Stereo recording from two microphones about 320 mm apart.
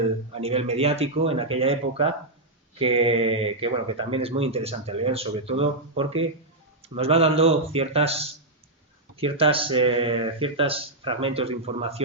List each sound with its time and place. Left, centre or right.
0.3 s speech: centre